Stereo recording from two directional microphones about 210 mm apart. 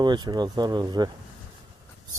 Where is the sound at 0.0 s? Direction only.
20° right (ahead or behind).